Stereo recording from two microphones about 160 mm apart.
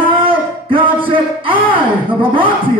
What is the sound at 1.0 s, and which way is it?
Music, 35° right (ahead or behind).